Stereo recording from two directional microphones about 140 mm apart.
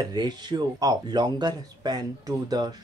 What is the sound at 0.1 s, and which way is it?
Speech, 30° right (ahead or behind).